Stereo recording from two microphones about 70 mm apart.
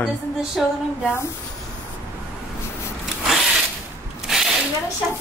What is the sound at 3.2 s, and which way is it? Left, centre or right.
Zipper, centre.